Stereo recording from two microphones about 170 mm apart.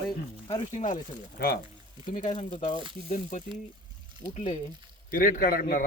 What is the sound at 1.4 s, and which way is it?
Speech, 65° left (ahead or behind).